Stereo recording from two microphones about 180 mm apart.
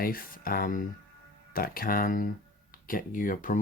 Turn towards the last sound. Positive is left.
turn(degrees=45)  # may be behind; listen again after turning